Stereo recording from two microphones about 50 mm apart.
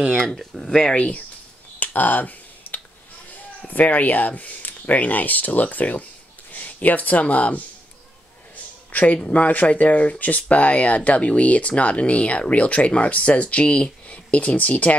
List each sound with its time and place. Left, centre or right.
0.4 s speech: centre
0.9 s speech: left
1.8 s finger snapping: left
3.6 s speech: left
8.9 s speech: left